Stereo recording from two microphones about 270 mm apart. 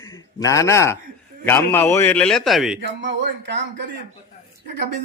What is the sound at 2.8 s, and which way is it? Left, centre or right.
Speech, right.